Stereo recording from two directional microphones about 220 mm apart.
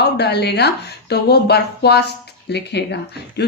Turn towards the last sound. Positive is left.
turn(degrees=50)  # may be behind; listen again after turning